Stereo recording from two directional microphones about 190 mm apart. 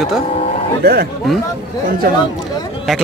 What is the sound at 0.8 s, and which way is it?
Speech, 60° right (ahead or behind).